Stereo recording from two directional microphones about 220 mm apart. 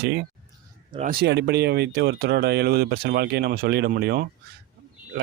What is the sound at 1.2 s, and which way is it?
Speech, 50° right (ahead or behind).